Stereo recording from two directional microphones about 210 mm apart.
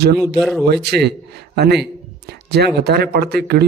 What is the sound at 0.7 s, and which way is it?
Speech, 50° right (ahead or behind).